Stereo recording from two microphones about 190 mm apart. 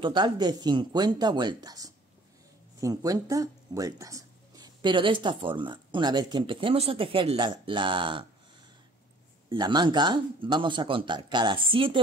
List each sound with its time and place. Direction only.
0.0 s speech: 25° right (ahead or behind)
9.5 s speech: 25° right (ahead or behind)